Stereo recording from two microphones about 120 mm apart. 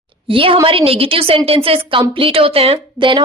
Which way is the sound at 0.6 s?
50° right (ahead or behind).